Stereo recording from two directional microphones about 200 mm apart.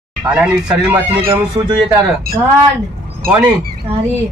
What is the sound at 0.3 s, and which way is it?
Speech, 5° right (ahead or behind).